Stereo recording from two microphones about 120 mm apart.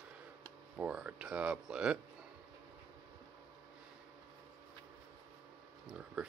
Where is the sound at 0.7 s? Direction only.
10° right (ahead or behind).